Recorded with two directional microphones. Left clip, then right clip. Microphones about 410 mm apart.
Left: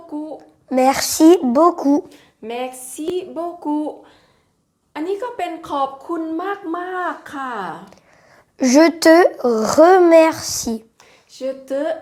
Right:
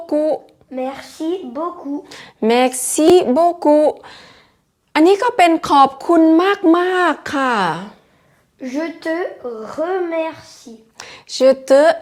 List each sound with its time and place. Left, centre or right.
0.7 s a woman's voice: left
2.0 s a woman's voice: right
4.9 s a woman's voice: right
8.5 s a woman's voice: left
10.9 s speech: right